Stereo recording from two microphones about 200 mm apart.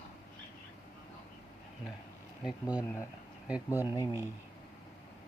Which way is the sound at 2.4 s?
5° right (ahead or behind).